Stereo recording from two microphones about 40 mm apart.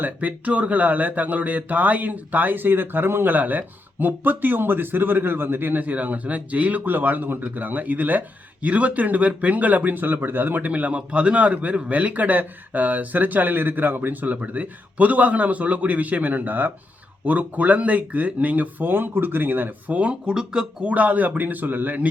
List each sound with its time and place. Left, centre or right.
0.0 s speech: right
3.3 s speech: right
10.7 s speech: right
18.9 s speech: right
20.2 s speech: centre
20.8 s speech: right